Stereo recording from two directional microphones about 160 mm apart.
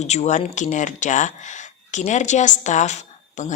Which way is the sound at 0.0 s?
45° left (ahead or behind).